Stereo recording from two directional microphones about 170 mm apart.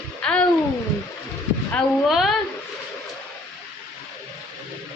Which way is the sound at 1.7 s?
Centre (ahead or behind).